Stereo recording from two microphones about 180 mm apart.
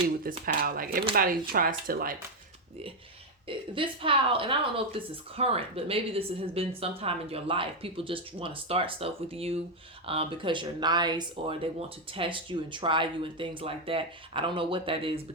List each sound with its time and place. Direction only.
0.4 s speech: 55° right (ahead or behind)
3.4 s a woman's voice: 30° right (ahead or behind)